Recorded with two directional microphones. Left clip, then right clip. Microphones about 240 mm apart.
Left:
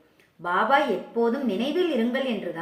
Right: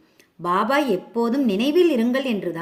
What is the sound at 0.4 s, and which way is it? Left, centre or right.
A woman's voice, right.